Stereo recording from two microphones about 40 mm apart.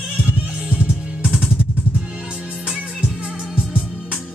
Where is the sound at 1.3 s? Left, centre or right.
Right.